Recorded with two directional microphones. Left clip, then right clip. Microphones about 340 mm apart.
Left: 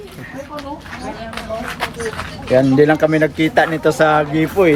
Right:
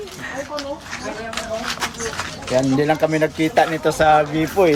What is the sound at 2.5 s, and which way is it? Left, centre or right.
Speech, centre.